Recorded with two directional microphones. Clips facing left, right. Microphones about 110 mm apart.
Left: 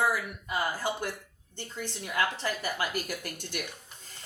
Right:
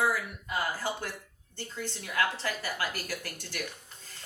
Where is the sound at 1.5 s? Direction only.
15° left (ahead or behind).